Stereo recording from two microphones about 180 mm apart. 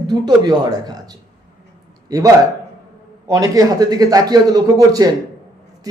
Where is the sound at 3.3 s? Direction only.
20° right (ahead or behind).